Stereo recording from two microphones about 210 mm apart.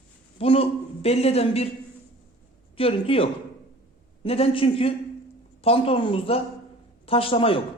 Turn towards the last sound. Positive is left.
turn(degrees=25)  # may be behind; listen again after turning